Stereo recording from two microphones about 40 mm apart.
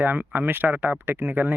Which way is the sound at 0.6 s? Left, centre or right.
Right.